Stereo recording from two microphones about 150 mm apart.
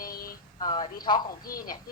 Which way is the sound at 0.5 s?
30° left (ahead or behind).